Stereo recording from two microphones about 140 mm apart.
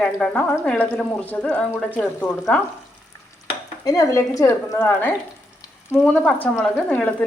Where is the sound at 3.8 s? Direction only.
25° left (ahead or behind).